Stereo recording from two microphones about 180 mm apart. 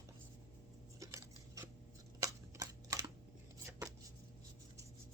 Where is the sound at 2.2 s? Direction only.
20° right (ahead or behind).